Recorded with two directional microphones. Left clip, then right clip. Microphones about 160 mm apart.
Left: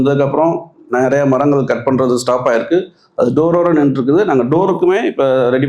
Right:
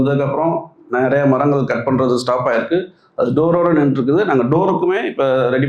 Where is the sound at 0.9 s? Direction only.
20° left (ahead or behind).